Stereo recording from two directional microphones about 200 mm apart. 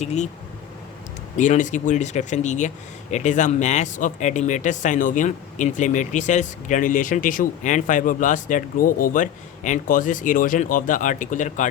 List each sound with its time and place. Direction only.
0.0 s speech: 35° left (ahead or behind)
1.4 s speech: 40° left (ahead or behind)